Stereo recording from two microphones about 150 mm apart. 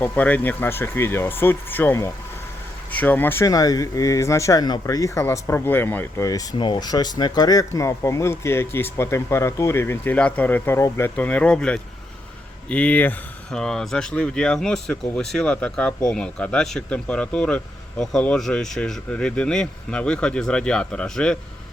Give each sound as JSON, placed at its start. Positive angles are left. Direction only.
{"t": 0.0, "sound": "speech", "side_deg": 10}